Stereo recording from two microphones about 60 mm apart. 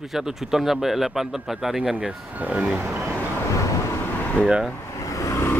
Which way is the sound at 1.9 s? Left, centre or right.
Centre.